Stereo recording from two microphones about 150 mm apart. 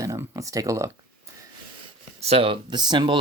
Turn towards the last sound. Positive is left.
turn(degrees=-30)  # may be behind; listen again after turning